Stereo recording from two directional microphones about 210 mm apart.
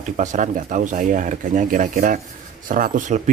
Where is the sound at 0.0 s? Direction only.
35° right (ahead or behind).